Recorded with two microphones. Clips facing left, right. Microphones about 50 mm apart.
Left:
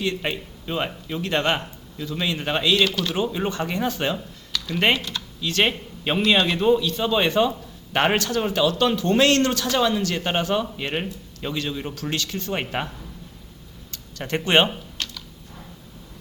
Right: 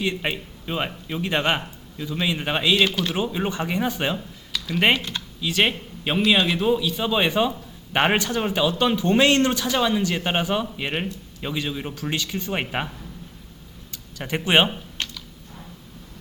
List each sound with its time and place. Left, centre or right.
0.0 s a man's voice: centre
4.9 s speech: right
5.4 s a man's voice: centre
13.9 s speech: centre
15.0 s typing: right